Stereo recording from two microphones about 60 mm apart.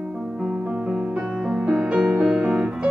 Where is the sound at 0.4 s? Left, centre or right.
Centre.